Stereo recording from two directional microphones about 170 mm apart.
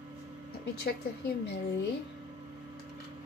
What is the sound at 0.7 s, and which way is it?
Speech, 70° left (ahead or behind).